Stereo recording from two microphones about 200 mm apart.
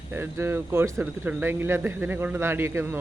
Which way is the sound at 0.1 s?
10° right (ahead or behind).